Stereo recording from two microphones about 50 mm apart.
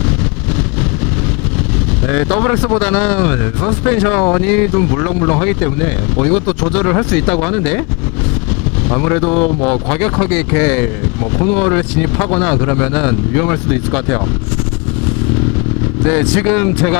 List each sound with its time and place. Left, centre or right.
2.0 s speech: left
8.9 s speech: left
16.0 s speech: centre